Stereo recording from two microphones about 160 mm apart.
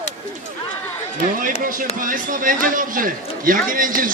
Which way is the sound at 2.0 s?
60° right (ahead or behind).